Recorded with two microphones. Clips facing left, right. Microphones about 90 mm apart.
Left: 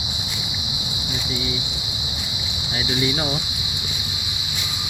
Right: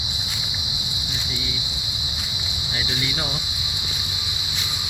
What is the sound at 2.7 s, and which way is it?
Speech, 5° left (ahead or behind).